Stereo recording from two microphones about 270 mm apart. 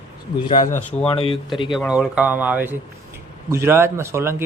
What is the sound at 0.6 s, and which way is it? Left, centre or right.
Speech, left.